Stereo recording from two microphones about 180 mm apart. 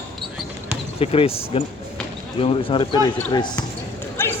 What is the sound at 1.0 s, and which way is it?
Speech, 30° left (ahead or behind).